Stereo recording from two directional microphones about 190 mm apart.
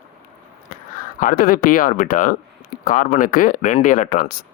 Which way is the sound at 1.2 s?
50° left (ahead or behind).